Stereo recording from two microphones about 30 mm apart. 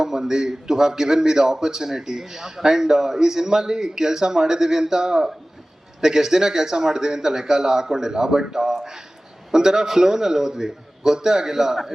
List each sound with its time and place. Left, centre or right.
0.0 s a man's voice: centre
8.6 s a sound: centre
9.5 s a man's voice: centre